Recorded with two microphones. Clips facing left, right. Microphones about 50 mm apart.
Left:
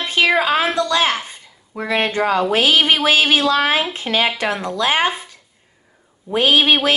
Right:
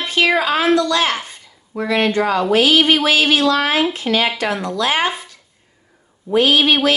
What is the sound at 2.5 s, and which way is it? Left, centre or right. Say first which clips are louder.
A woman's voice: right 5 dB; left.